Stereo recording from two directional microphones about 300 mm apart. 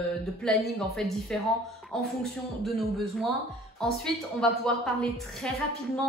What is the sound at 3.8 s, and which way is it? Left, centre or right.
A woman's voice, centre.